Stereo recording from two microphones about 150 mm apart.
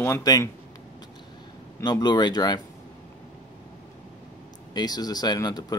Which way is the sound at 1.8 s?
25° left (ahead or behind).